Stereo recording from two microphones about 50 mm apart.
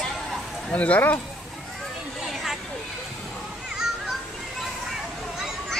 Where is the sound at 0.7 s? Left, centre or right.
Left.